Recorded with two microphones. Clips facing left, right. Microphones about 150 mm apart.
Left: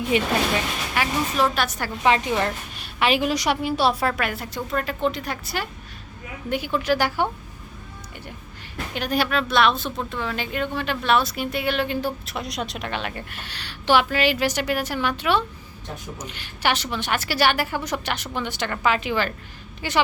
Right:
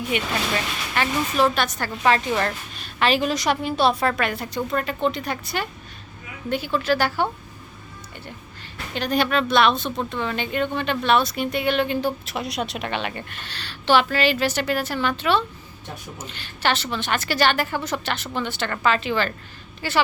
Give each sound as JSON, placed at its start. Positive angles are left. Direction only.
{"t": 0.1, "sound": "speech", "side_deg": 30}
{"t": 0.9, "sound": "a woman's voice", "side_deg": 5}
{"t": 6.5, "sound": "a woman's voice", "side_deg": 15}
{"t": 9.0, "sound": "a woman's voice", "side_deg": 5}